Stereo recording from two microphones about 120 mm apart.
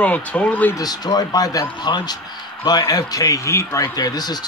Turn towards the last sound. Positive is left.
turn(degrees=35)  # may be behind; listen again after turning